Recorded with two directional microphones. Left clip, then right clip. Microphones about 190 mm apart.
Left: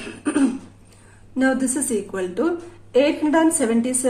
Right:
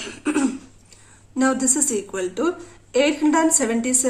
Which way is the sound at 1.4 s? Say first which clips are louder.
Even; 35° right (ahead or behind).